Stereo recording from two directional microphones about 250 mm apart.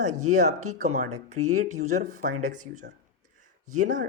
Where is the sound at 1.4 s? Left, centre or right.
Right.